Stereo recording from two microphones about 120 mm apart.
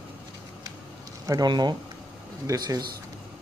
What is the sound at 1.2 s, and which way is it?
Speech, 30° right (ahead or behind).